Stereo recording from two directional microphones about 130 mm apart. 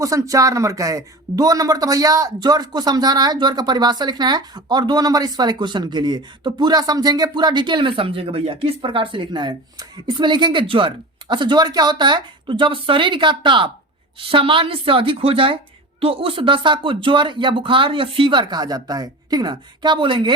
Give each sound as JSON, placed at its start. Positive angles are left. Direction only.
{"t": 0.0, "sound": "a woman's voice", "side_deg": -25}